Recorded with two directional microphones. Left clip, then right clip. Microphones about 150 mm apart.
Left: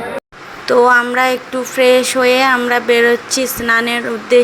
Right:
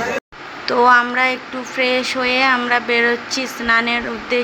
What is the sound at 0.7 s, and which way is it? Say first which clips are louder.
Speech: left 3 dB; 25° left (ahead or behind).